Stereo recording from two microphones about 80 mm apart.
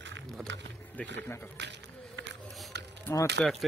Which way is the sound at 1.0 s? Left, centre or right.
Centre.